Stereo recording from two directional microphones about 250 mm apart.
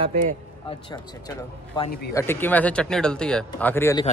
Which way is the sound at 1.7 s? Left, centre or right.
Centre.